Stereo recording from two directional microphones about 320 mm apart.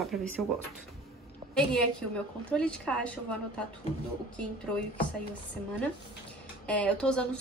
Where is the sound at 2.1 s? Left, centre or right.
Centre.